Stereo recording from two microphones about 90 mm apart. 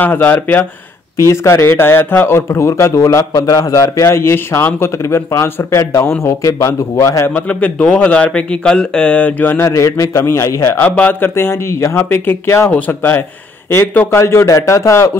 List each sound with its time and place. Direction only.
0.0 s speech: 20° left (ahead or behind)
1.1 s a man's voice: 35° left (ahead or behind)
7.2 s a man's voice: 15° left (ahead or behind); by 10.8 s 30° left (ahead or behind)
10.8 s speech: 15° left (ahead or behind)
12.7 s a man's voice: 20° left (ahead or behind)